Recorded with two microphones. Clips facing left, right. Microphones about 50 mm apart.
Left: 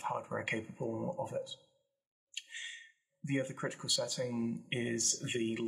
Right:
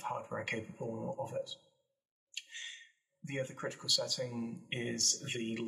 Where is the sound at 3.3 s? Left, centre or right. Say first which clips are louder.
Left 3 dB; left.